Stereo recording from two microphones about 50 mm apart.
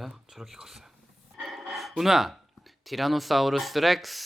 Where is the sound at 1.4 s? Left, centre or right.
Centre.